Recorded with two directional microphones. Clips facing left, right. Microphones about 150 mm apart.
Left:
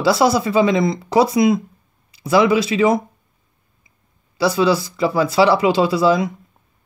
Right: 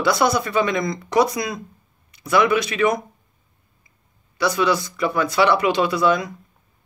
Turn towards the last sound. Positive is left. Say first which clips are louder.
# left 3 dB
turn(degrees=30)  # may be behind; listen again after turning